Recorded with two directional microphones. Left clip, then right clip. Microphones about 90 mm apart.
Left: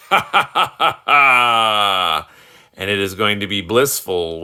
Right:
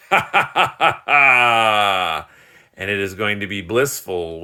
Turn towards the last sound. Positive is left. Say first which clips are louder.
# left 4 dB
turn(degrees=30)  # may be behind; listen again after turning